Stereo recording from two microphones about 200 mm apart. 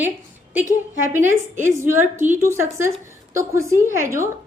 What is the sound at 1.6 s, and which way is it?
A woman's voice, 10° right (ahead or behind).